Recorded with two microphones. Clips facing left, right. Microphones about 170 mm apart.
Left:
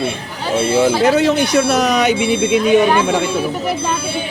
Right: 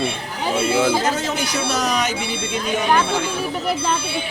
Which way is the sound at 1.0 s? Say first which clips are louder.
Left 9 dB; 65° left (ahead or behind).